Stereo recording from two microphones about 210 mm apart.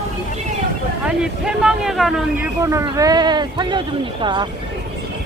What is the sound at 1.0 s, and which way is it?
Speech, 5° right (ahead or behind).